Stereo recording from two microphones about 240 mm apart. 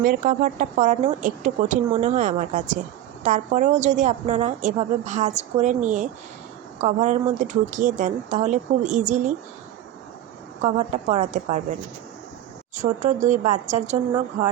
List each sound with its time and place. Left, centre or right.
0.0 s a woman's voice: right
10.6 s a woman's voice: right
12.8 s a woman's voice: right